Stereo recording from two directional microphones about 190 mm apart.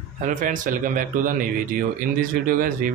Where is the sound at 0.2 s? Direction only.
45° right (ahead or behind).